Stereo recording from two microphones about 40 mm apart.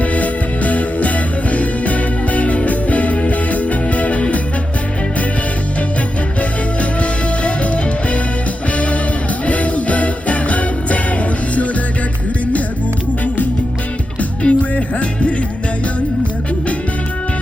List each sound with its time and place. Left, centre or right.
0.0 s music: left
6.4 s music: left
14.2 s music: left